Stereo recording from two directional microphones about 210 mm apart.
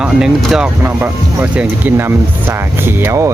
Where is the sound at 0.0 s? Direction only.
5° right (ahead or behind).